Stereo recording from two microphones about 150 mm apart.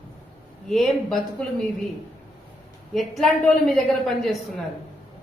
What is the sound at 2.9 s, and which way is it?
A woman's voice, centre (ahead or behind).